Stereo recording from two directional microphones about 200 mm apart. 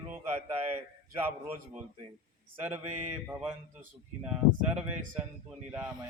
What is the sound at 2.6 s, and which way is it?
Speech, 10° right (ahead or behind).